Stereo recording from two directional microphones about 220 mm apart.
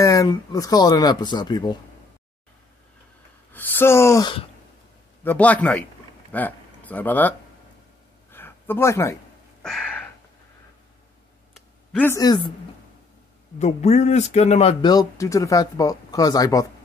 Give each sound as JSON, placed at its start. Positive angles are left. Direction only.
{"t": 0.0, "sound": "speech", "side_deg": 15}
{"t": 3.5, "sound": "speech", "side_deg": 10}
{"t": 5.2, "sound": "speech", "side_deg": 10}
{"t": 8.3, "sound": "a sound", "side_deg": 10}
{"t": 11.5, "sound": "a sound", "side_deg": 0}
{"t": 12.1, "sound": "speech", "side_deg": 15}
{"t": 13.6, "sound": "speech", "side_deg": 30}